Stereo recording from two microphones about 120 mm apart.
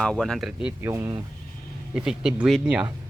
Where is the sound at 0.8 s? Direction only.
20° right (ahead or behind).